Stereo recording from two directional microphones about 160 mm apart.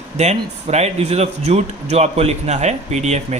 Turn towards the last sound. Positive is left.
turn(degrees=-45)  # may be behind; listen again after turning